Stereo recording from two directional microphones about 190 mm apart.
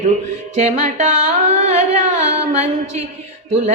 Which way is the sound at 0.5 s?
40° right (ahead or behind).